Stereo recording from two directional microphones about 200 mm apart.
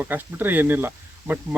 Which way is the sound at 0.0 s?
10° right (ahead or behind).